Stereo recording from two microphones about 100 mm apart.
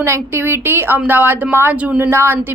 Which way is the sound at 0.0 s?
25° right (ahead or behind).